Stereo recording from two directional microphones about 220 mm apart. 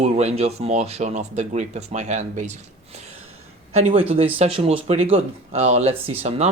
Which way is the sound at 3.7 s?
25° right (ahead or behind).